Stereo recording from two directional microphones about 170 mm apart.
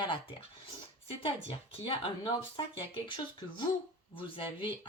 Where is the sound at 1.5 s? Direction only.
30° left (ahead or behind).